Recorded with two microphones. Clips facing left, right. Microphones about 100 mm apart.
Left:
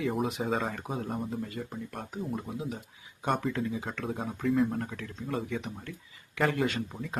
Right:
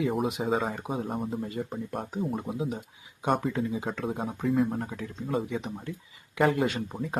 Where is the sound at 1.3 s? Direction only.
25° right (ahead or behind).